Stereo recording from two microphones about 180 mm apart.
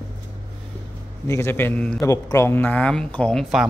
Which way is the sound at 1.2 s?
15° left (ahead or behind).